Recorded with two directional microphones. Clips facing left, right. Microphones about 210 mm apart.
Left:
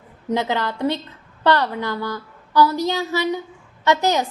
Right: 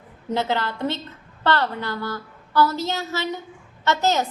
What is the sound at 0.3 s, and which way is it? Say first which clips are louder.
A woman's voice: left 2 dB; 15° left (ahead or behind).